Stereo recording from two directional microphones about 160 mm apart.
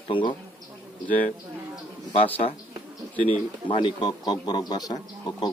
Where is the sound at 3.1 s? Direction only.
30° right (ahead or behind).